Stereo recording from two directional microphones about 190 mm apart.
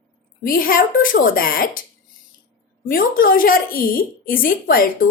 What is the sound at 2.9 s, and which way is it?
Speech, 50° left (ahead or behind).